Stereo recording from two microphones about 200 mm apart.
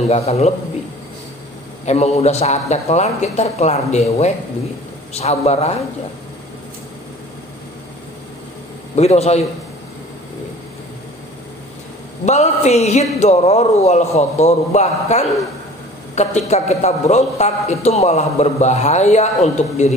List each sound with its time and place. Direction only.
0.1 s a man's voice: 30° left (ahead or behind)
1.9 s a man's voice: 35° left (ahead or behind)
8.9 s a man's voice: 35° left (ahead or behind)
12.3 s a man's voice: 35° left (ahead or behind)